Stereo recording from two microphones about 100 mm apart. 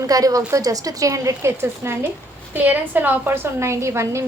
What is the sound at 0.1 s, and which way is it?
A woman's voice, 35° right (ahead or behind).